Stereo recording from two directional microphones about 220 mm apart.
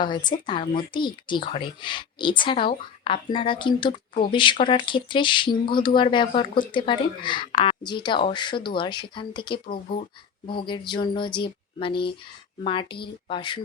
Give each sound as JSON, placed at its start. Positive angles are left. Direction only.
{"t": 0.0, "sound": "a woman's voice", "side_deg": 20}